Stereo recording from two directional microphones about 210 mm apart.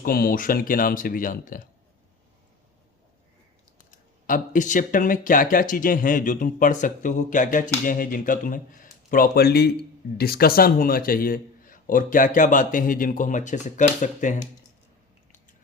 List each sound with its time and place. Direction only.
0.0 s speech: 45° left (ahead or behind)
3.8 s speech: 40° left (ahead or behind)